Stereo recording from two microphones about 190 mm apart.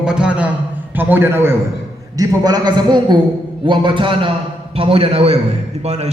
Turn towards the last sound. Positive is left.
turn(degrees=-35)  # may be behind; listen again after turning